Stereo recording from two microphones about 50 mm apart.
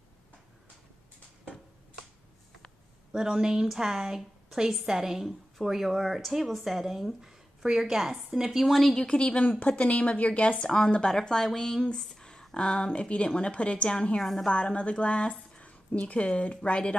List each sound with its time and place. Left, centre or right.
3.1 s a woman's voice: centre
8.9 s a woman's voice: centre
14.2 s a woman's voice: centre
14.5 s a woman's voice: left